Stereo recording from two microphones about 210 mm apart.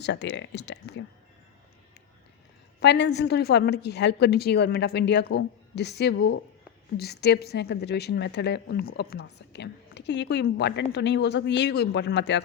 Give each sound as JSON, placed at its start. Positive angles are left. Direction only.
{"t": 0.0, "sound": "speech", "side_deg": 55}
{"t": 2.8, "sound": "a woman's voice", "side_deg": 55}